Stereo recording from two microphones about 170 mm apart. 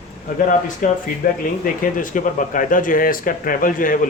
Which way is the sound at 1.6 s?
50° left (ahead or behind).